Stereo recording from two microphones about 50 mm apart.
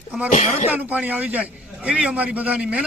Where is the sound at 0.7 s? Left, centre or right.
Right.